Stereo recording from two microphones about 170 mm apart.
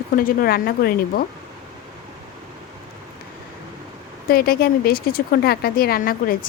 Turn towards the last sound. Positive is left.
turn(degrees=55)  # may be behind; listen again after turning